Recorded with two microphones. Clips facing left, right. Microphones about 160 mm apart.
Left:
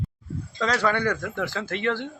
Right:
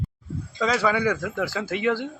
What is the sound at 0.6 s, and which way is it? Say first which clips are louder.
Speech: right 1 dB; 5° right (ahead or behind).